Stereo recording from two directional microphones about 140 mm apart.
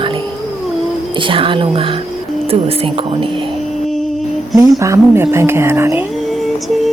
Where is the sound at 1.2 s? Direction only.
40° right (ahead or behind).